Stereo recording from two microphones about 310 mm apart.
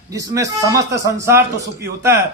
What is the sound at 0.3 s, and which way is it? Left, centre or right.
Speech, centre.